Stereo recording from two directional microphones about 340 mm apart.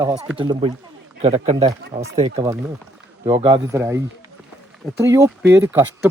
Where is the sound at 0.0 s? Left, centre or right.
Centre.